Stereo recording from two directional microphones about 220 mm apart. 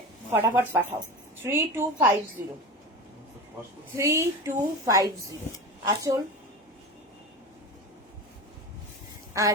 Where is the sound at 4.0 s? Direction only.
10° right (ahead or behind).